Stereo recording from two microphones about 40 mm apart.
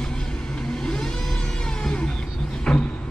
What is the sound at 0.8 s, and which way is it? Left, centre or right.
Vehicle, centre.